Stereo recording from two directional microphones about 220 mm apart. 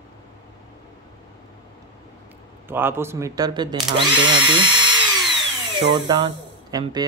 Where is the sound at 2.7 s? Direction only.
10° right (ahead or behind).